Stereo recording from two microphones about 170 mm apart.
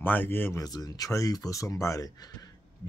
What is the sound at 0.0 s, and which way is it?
Speech, 10° left (ahead or behind).